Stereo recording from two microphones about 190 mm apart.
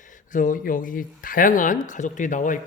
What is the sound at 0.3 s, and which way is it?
Speech, 45° left (ahead or behind).